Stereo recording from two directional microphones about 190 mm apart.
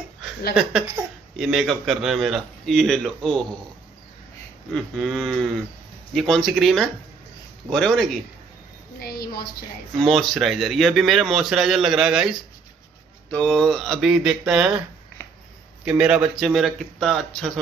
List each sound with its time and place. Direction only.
1.3 s speech: centre (ahead or behind)
4.7 s speech: centre (ahead or behind)
9.0 s a woman's voice: 55° left (ahead or behind)
9.9 s speech: centre (ahead or behind)
15.8 s speech: 5° right (ahead or behind)